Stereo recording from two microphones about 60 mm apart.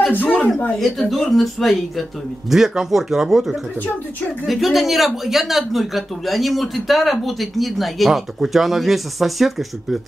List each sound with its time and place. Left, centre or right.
0.1 s speech: left
0.7 s speech: centre